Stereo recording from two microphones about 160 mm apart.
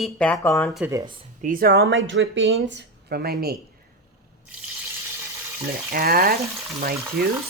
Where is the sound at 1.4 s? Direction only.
65° right (ahead or behind).